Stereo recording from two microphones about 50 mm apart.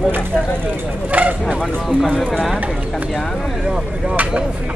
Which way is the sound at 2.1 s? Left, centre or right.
Centre.